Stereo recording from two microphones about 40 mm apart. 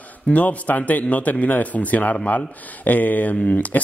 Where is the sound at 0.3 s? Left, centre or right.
Left.